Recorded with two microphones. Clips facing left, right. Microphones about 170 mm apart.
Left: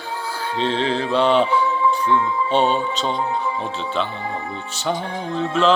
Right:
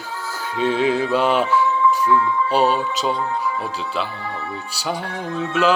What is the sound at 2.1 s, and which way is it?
Music, 25° left (ahead or behind).